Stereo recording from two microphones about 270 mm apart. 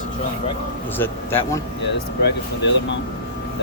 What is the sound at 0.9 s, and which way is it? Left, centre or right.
Speech, centre.